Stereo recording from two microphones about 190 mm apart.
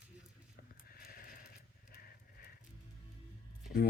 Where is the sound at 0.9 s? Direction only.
50° left (ahead or behind).